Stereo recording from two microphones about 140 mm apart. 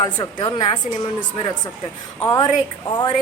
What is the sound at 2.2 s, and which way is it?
Speech, 25° left (ahead or behind).